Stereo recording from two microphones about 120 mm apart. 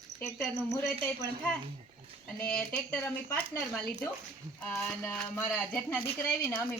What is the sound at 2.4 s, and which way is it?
Speech, 10° left (ahead or behind).